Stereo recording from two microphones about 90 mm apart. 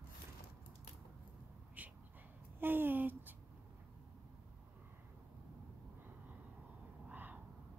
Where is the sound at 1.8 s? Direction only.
15° right (ahead or behind).